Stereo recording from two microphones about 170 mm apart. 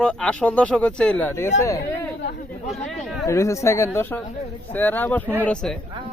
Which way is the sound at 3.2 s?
15° left (ahead or behind).